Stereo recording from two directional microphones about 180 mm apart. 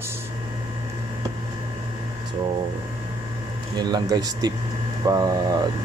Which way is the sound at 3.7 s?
20° right (ahead or behind).